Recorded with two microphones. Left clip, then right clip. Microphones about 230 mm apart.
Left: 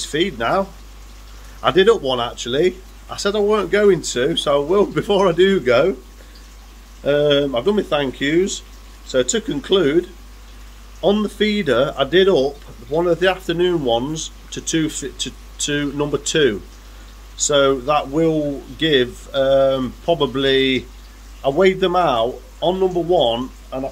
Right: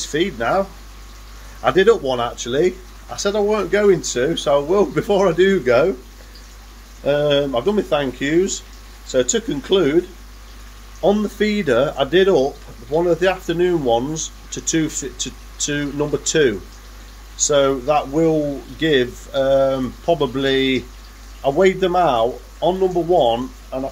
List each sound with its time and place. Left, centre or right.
0.0 s speech: centre
7.1 s speech: centre